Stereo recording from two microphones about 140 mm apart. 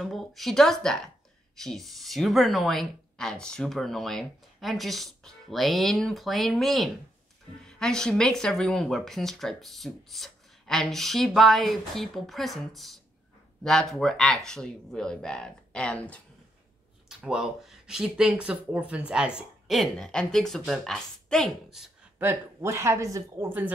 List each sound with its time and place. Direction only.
0.0 s speech: centre (ahead or behind)
17.1 s speech: 5° right (ahead or behind)
22.2 s speech: 15° right (ahead or behind)